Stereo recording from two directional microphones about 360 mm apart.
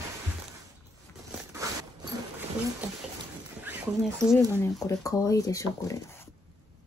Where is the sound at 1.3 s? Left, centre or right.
Centre.